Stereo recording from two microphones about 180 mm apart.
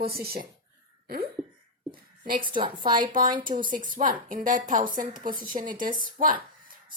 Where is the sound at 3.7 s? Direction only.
45° right (ahead or behind).